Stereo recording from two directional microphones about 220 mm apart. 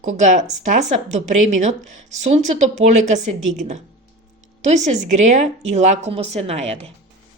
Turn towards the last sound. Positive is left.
turn(degrees=-30)  # may be behind; listen again after turning